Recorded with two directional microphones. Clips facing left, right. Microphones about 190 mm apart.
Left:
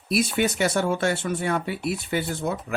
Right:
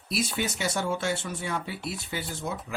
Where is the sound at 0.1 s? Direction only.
60° left (ahead or behind).